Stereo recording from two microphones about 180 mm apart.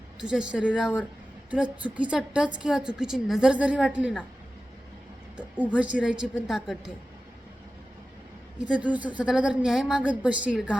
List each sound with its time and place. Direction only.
0.2 s a woman's voice: 5° right (ahead or behind)
5.4 s a woman's voice: 5° right (ahead or behind)
8.6 s a woman's voice: 5° right (ahead or behind)